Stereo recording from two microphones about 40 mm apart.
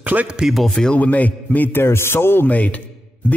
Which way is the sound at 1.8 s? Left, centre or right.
Left.